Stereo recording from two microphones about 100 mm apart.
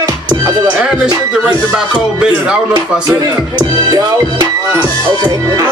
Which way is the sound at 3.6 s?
45° right (ahead or behind).